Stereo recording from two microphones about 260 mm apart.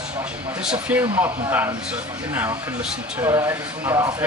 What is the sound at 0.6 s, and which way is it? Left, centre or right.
Speech, centre.